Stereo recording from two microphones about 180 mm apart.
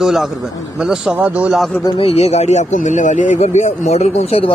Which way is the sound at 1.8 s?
30° left (ahead or behind).